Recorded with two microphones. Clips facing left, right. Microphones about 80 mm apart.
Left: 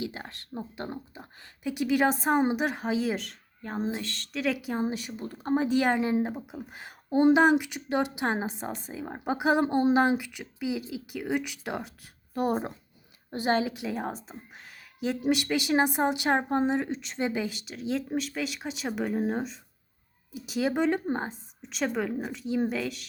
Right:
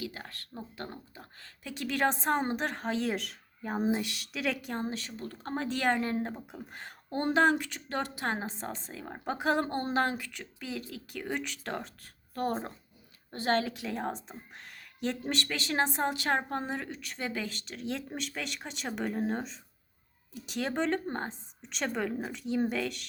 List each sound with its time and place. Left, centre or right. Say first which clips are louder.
0.0 s a woman's voice: left 4 dB; left; by 23.0 s centre